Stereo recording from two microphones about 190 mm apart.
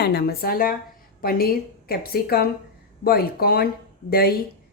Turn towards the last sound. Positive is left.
turn(degrees=55)  # may be behind; listen again after turning